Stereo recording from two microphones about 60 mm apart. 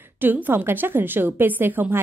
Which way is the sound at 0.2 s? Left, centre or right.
Right.